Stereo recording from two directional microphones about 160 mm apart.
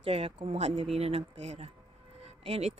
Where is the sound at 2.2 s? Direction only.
40° right (ahead or behind).